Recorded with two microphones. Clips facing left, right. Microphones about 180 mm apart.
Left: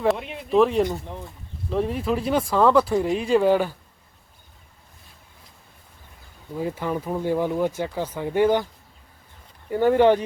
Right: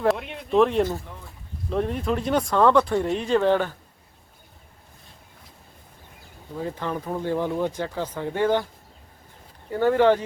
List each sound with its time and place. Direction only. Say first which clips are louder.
0.0 s speech: even; centre (ahead or behind)
6.6 s speech: left 3 dB; 10° left (ahead or behind)
9.6 s speech: left 2 dB; 15° left (ahead or behind)